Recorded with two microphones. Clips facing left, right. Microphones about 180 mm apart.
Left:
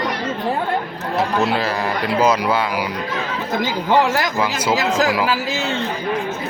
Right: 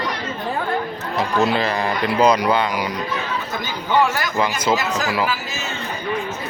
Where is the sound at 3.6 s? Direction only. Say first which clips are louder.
Left 2 dB; 90° left.